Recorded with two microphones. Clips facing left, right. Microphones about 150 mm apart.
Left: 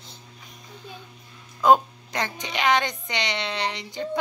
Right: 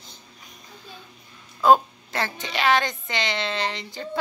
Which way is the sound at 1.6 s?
15° left (ahead or behind).